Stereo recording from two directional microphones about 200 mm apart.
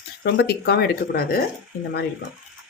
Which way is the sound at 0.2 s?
55° left (ahead or behind).